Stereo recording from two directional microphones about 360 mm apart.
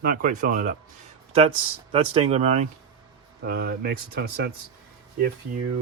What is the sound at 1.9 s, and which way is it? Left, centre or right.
Speech, centre.